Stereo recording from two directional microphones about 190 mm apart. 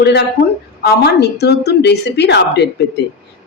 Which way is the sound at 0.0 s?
55° left (ahead or behind).